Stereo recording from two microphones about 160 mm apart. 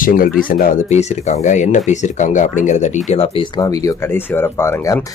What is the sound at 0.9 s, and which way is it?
A man's voice, 50° left (ahead or behind).